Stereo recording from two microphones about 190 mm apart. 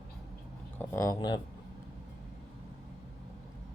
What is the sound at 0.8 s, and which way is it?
Speech, 15° left (ahead or behind).